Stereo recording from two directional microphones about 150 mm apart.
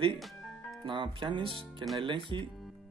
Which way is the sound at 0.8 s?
35° right (ahead or behind).